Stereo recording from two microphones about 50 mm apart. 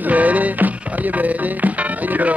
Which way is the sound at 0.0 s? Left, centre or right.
Right.